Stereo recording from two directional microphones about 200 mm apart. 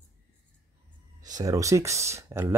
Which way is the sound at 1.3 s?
15° right (ahead or behind).